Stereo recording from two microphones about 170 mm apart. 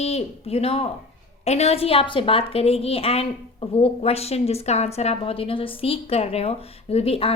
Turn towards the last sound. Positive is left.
turn(degrees=35)  # may be behind; listen again after turning